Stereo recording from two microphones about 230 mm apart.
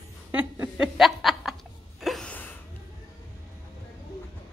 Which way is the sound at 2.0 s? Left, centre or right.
Centre.